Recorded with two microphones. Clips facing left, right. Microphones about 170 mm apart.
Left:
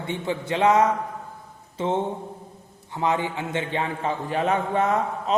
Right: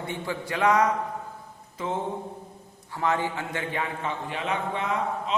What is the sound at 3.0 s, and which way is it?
Speech, 20° left (ahead or behind).